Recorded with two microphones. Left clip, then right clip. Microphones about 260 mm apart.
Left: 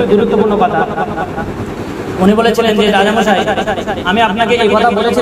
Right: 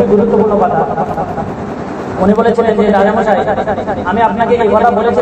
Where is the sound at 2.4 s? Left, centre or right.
Left.